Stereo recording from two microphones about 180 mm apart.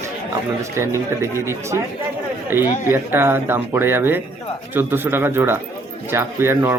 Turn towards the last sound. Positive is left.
turn(degrees=-15)  # may be behind; listen again after turning